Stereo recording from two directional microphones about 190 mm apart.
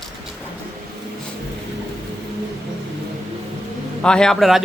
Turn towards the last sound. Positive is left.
turn(degrees=0)  # may be behind; listen again after turning